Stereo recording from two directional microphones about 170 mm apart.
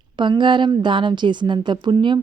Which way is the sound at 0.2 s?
25° right (ahead or behind).